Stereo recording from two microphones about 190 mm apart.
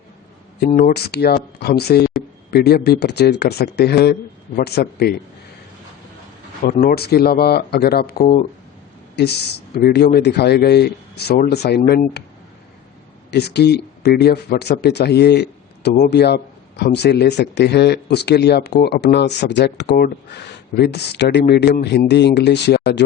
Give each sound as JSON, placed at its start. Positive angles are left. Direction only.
{"t": 0.7, "sound": "speech", "side_deg": 45}
{"t": 6.7, "sound": "speech", "side_deg": 50}
{"t": 8.2, "sound": "speech", "side_deg": 40}
{"t": 9.1, "sound": "speech", "side_deg": 60}
{"t": 13.3, "sound": "speech", "side_deg": 60}